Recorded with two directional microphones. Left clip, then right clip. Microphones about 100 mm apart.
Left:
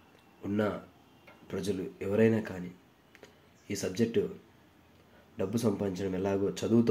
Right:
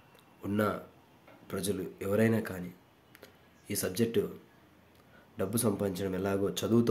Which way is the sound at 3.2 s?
15° right (ahead or behind).